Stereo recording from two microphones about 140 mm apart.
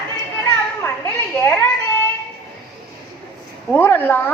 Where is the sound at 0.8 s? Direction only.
20° left (ahead or behind).